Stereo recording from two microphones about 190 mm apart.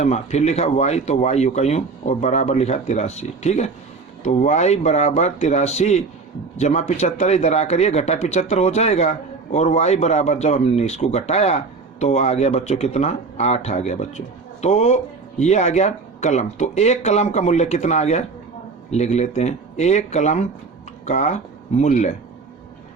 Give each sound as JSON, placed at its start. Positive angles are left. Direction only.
{"t": 0.0, "sound": "speech", "side_deg": 35}